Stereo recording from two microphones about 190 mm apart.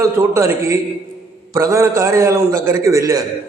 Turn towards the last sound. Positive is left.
turn(degrees=-15)  # may be behind; listen again after turning